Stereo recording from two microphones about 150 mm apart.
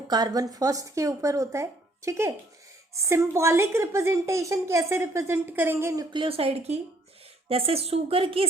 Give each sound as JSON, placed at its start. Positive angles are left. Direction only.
{"t": 0.1, "sound": "a woman's voice", "side_deg": -25}
{"t": 6.1, "sound": "a woman's voice", "side_deg": -35}